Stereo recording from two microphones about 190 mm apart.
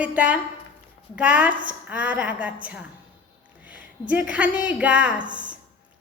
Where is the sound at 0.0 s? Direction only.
5° right (ahead or behind).